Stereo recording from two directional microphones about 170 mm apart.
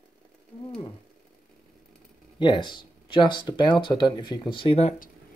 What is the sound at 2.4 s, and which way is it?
Speech, 25° left (ahead or behind).